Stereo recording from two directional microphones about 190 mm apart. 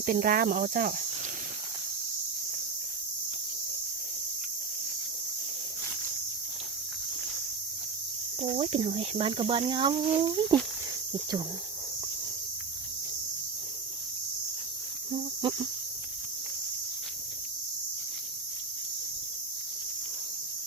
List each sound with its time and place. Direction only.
0.0 s speech: 45° right (ahead or behind)
8.4 s speech: 30° right (ahead or behind)
15.4 s speech: 25° right (ahead or behind)